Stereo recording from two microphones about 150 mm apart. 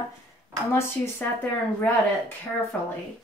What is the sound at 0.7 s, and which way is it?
A woman's voice, 15° left (ahead or behind).